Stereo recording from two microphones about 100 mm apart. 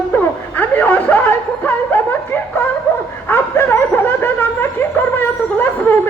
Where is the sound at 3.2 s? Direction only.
20° left (ahead or behind).